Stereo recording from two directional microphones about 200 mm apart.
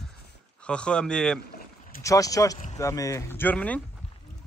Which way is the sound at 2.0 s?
15° left (ahead or behind).